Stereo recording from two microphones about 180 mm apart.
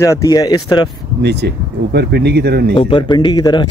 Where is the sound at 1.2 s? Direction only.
70° right (ahead or behind).